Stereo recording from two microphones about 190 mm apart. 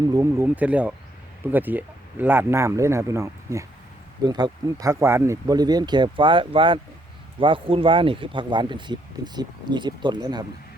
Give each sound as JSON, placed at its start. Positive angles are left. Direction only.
{"t": 0.0, "sound": "speech", "side_deg": -15}